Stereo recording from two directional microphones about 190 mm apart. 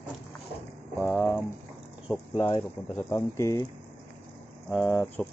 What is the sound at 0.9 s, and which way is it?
Boiling, centre (ahead or behind).